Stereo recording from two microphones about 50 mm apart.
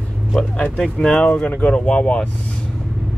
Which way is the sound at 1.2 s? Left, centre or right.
Left.